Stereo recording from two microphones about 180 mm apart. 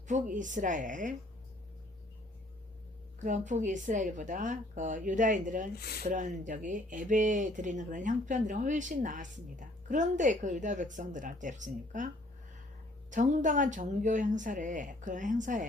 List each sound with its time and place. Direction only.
0.1 s speech: 45° right (ahead or behind)
3.2 s speech: 45° right (ahead or behind)
13.1 s speech: 45° right (ahead or behind)